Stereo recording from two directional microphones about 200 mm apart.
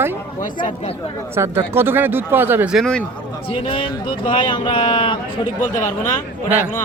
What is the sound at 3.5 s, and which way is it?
Speech, 25° left (ahead or behind).